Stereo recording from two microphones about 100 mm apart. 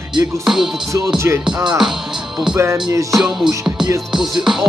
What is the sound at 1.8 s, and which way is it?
Music, 5° right (ahead or behind).